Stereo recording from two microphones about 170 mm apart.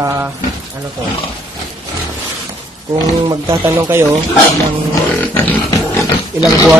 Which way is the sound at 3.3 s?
20° right (ahead or behind).